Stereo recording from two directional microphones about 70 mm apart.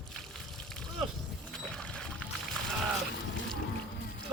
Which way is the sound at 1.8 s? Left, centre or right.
Centre.